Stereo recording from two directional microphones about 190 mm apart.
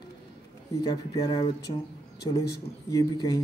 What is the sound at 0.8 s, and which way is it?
Speech, 20° left (ahead or behind).